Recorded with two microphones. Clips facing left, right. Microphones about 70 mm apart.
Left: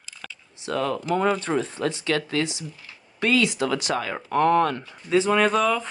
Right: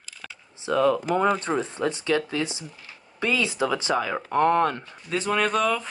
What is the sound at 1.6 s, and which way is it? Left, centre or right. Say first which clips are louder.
Speech: even; right.